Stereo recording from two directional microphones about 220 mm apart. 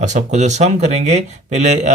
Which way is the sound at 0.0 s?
35° right (ahead or behind).